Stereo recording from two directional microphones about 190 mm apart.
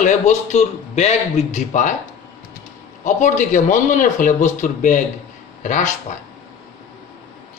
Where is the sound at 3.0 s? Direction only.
40° left (ahead or behind).